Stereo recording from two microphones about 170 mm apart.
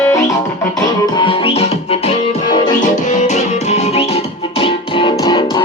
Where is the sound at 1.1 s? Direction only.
30° left (ahead or behind).